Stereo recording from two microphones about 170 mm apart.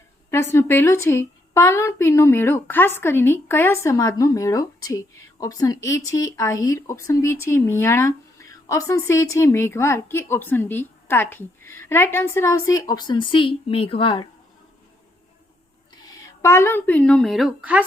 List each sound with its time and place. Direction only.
0.3 s a woman's voice: 15° left (ahead or behind); by 14.3 s 30° left (ahead or behind)
16.0 s a woman's voice: 15° left (ahead or behind); by 17.8 s 5° right (ahead or behind)